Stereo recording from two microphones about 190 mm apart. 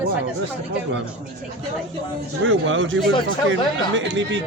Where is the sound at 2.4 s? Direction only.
90° right.